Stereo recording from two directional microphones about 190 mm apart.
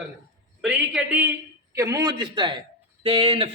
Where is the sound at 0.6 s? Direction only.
5° right (ahead or behind).